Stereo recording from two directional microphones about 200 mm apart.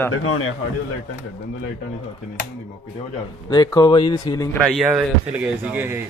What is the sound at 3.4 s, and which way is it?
A man's voice, 20° left (ahead or behind).